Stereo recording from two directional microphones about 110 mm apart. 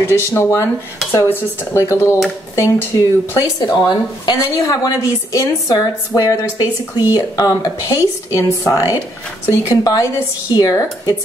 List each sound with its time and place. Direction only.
0.0 s speech: 20° left (ahead or behind)
3.5 s a woman's voice: 40° left (ahead or behind)